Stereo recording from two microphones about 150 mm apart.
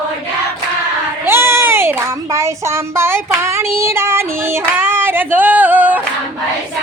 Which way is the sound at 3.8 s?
15° right (ahead or behind).